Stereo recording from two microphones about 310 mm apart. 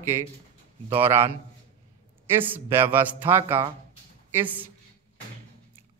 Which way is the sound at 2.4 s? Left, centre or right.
Centre.